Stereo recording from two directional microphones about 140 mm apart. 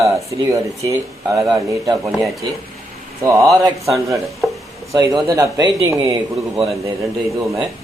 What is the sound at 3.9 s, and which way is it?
Speech, centre (ahead or behind).